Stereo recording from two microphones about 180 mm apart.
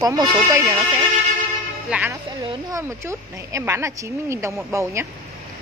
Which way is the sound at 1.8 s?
5° right (ahead or behind).